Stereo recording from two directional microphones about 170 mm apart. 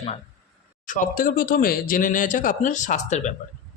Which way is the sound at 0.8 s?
50° left (ahead or behind).